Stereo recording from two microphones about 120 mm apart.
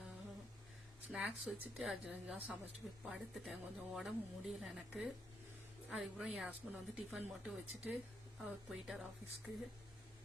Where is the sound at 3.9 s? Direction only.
Centre (ahead or behind).